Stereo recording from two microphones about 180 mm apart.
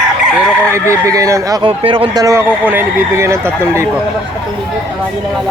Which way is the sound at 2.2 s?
15° right (ahead or behind).